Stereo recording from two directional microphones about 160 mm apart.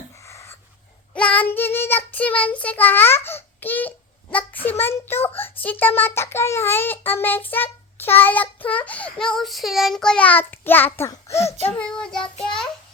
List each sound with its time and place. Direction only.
0.3 s a sound: 15° left (ahead or behind)
1.1 s child singing: 10° left (ahead or behind)
11.7 s child singing: 5° left (ahead or behind)